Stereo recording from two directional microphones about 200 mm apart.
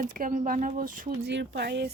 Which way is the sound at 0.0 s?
40° right (ahead or behind).